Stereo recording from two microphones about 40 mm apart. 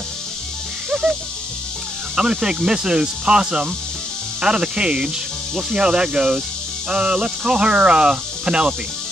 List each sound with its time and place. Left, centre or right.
0.8 s music: right
2.1 s speech: centre